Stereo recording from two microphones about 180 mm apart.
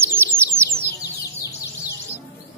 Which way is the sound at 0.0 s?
15° right (ahead or behind).